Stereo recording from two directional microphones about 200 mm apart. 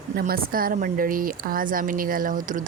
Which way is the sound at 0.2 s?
50° right (ahead or behind).